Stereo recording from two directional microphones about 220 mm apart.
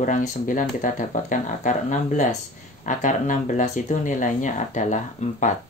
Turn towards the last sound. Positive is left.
turn(degrees=35)  # may be behind; listen again after turning